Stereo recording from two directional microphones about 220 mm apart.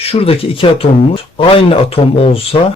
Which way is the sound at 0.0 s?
25° left (ahead or behind).